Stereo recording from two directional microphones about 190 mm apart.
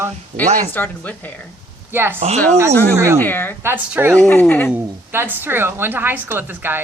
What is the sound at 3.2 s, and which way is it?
Speech, 10° left (ahead or behind).